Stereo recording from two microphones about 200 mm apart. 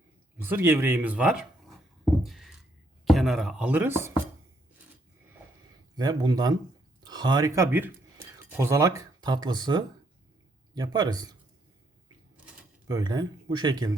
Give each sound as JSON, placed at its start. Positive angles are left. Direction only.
{"t": 0.3, "sound": "speech", "side_deg": -10}
{"t": 2.2, "sound": "a sound", "side_deg": 0}
{"t": 3.1, "sound": "speech", "side_deg": 0}
{"t": 6.0, "sound": "speech", "side_deg": -20}
{"t": 12.9, "sound": "speech", "side_deg": -20}